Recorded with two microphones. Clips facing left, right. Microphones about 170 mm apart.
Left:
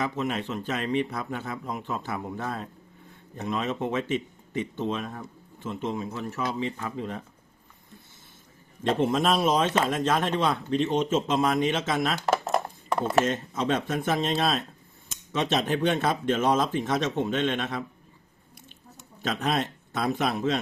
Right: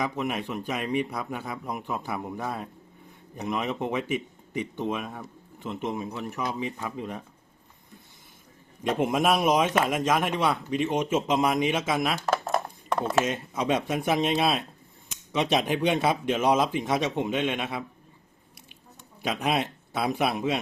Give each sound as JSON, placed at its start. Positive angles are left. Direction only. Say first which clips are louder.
{"t": 0.0, "sound": "speech", "louder": "even", "side_deg": -15}
{"t": 8.8, "sound": "speech", "louder": "left 1 dB", "side_deg": -10}
{"t": 12.9, "sound": "mechanisms", "louder": "even", "side_deg": 5}
{"t": 13.2, "sound": "speech", "louder": "left 1 dB", "side_deg": -10}
{"t": 19.2, "sound": "speech", "louder": "even", "side_deg": -10}